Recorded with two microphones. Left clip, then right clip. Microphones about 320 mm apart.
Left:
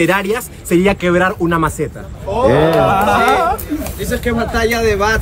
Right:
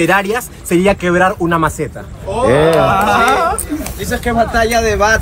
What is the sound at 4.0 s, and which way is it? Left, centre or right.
Speech, centre.